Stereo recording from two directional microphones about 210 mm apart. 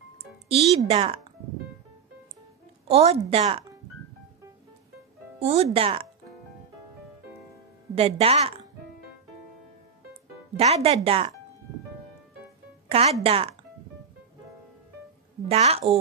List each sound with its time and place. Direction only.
0.5 s speech: 30° right (ahead or behind)
2.9 s speech: 30° right (ahead or behind)
5.4 s speech: 30° right (ahead or behind)
7.9 s speech: 30° right (ahead or behind)
10.5 s speech: 30° right (ahead or behind)
12.8 s music: 30° right (ahead or behind)
13.2 s speech: 25° right (ahead or behind)
15.4 s speech: 30° right (ahead or behind)